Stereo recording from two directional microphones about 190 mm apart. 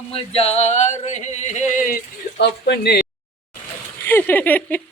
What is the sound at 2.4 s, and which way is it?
Speech, 60° left (ahead or behind).